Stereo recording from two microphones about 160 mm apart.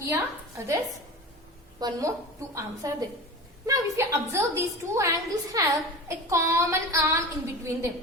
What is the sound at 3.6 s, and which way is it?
A woman's voice, 20° right (ahead or behind).